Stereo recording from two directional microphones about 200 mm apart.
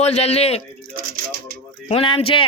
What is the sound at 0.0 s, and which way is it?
Speech, 30° left (ahead or behind).